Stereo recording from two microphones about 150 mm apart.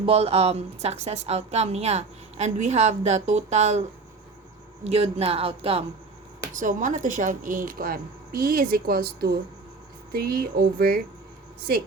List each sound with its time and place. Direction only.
0.0 s a woman's voice: 40° right (ahead or behind)
6.6 s a woman's voice: 60° right (ahead or behind); by 11.0 s 90° right